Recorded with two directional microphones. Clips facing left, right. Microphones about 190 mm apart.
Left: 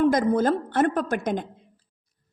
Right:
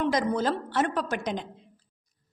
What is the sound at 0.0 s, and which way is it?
A woman's voice, 50° left (ahead or behind).